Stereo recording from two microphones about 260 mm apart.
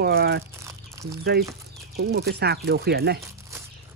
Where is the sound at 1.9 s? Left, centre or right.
Right.